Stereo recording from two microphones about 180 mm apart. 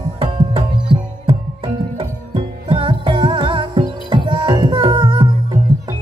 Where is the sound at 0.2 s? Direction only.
30° right (ahead or behind).